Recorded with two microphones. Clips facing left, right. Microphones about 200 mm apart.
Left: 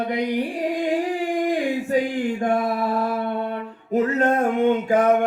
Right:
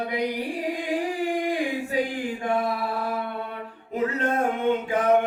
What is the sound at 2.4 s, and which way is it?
Mantra, 45° left (ahead or behind).